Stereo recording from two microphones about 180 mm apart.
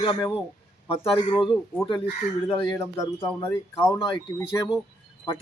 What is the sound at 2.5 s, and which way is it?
A man's voice, 25° left (ahead or behind).